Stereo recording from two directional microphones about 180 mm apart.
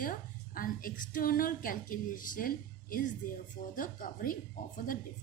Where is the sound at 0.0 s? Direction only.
50° left (ahead or behind).